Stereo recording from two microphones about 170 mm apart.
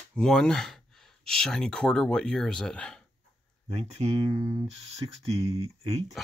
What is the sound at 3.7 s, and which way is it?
Speech, 30° right (ahead or behind).